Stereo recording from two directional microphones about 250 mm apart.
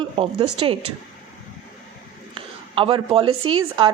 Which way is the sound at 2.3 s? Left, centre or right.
Right.